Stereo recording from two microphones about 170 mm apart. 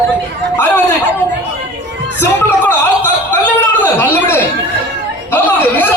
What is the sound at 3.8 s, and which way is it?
A man's voice, 15° left (ahead or behind).